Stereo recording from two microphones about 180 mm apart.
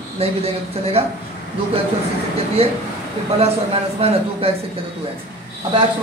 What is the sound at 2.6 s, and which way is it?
A man's voice, 35° right (ahead or behind).